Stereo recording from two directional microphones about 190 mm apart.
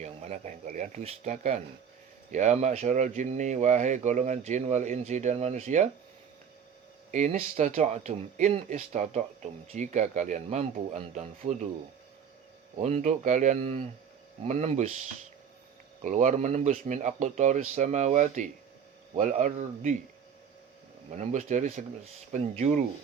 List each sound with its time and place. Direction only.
0.0 s speech: 35° right (ahead or behind)
7.1 s speech: 40° right (ahead or behind)
12.8 s speech: 35° right (ahead or behind)
21.2 s speech: 40° right (ahead or behind)